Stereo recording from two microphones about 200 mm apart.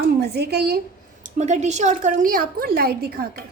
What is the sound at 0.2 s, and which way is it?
Speech, 55° right (ahead or behind).